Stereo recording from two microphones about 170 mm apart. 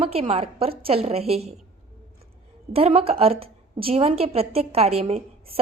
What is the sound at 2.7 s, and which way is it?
A woman's voice, 35° right (ahead or behind).